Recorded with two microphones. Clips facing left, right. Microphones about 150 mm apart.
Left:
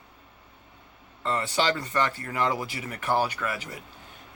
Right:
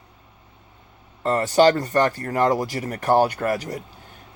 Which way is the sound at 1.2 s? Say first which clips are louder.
Right 10 dB; 45° right (ahead or behind).